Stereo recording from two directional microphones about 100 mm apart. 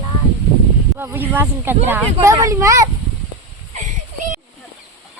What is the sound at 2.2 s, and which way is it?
Speech, 35° right (ahead or behind).